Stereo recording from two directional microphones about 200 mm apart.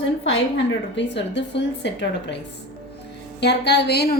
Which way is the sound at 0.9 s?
65° left (ahead or behind).